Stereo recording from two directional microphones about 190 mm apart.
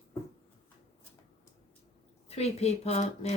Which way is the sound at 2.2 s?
35° left (ahead or behind).